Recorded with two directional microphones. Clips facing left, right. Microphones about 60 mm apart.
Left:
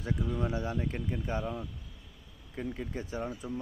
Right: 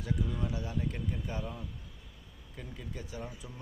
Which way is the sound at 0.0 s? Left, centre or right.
Left.